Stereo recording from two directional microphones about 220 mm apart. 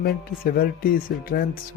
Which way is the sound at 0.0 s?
45° left (ahead or behind).